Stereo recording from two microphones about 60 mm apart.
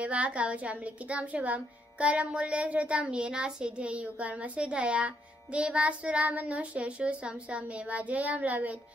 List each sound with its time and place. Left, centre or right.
0.0 s a woman's voice: right